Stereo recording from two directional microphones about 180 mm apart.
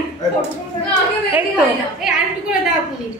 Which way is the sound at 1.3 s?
5° right (ahead or behind).